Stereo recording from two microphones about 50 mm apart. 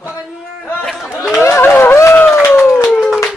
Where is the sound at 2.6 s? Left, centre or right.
Left.